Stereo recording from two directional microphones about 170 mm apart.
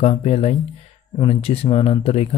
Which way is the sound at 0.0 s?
35° left (ahead or behind).